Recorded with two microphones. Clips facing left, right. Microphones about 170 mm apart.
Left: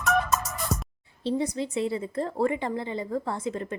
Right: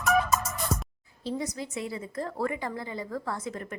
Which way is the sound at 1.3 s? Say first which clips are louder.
Left 5 dB; 30° left (ahead or behind).